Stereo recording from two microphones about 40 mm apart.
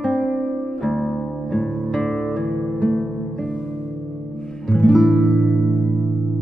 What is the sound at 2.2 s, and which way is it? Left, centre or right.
Music, left.